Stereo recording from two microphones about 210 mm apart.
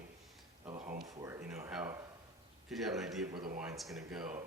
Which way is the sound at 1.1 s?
15° right (ahead or behind).